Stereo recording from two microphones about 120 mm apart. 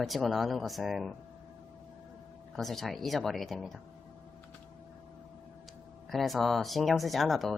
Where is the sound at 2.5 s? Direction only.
Centre (ahead or behind).